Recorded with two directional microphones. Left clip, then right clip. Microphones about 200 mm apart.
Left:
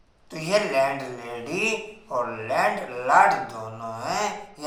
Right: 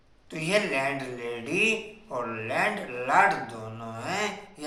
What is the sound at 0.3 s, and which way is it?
Speech, 10° left (ahead or behind).